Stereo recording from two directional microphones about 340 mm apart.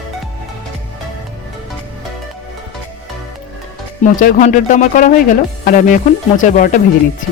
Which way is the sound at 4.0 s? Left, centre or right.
Left.